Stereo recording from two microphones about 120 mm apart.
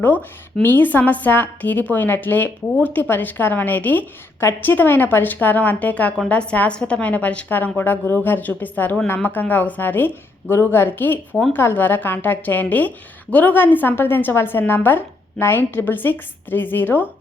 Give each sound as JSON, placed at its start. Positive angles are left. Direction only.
{"t": 0.0, "sound": "a woman's voice", "side_deg": 15}